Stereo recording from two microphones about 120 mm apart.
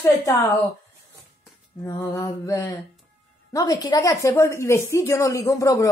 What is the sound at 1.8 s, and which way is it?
A woman's voice, 20° left (ahead or behind).